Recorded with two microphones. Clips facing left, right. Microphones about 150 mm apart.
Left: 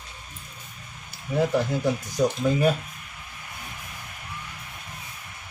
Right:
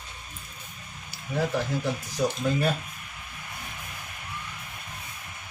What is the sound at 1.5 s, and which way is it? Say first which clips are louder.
Speech: left 4 dB; 15° left (ahead or behind).